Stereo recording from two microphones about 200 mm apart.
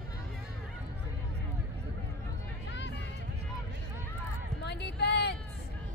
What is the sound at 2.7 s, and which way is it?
Music, 60° left (ahead or behind).